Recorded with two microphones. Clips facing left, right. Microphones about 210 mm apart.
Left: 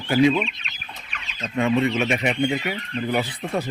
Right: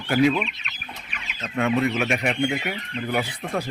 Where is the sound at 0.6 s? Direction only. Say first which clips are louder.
Right 1 dB; 25° left (ahead or behind).